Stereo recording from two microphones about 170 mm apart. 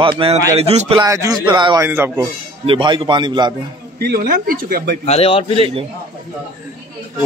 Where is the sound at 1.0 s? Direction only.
20° right (ahead or behind).